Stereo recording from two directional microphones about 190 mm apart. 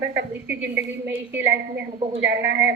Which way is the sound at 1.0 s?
10° right (ahead or behind).